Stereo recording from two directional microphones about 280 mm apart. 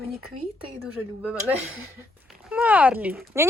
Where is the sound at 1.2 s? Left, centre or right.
Centre.